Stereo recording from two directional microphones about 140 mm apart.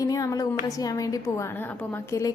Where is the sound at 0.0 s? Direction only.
25° left (ahead or behind).